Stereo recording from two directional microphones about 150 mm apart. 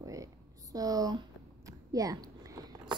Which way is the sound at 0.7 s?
25° right (ahead or behind).